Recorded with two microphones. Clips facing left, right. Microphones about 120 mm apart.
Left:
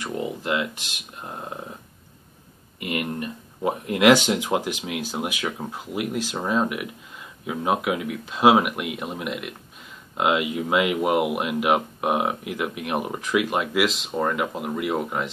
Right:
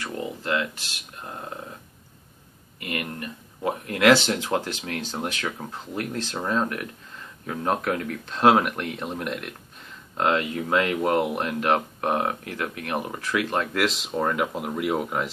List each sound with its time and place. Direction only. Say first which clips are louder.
0.0 s speech: left 3 dB; 15° left (ahead or behind)
2.8 s speech: left 4 dB; 20° left (ahead or behind)
13.8 s speech: left 1 dB; centre (ahead or behind)